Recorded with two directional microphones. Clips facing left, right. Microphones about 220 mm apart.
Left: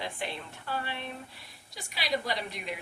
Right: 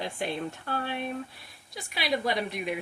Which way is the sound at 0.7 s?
50° right (ahead or behind).